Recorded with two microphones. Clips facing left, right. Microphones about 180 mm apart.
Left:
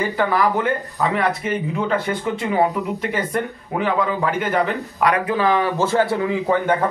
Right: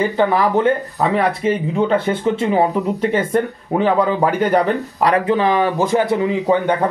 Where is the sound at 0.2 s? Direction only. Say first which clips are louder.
Right 4 dB; 25° right (ahead or behind).